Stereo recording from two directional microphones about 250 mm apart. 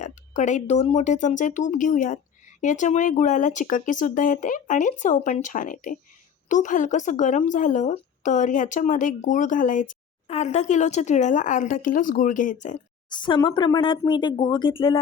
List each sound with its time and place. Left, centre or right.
0.0 s a woman's voice: left
13.1 s speech: centre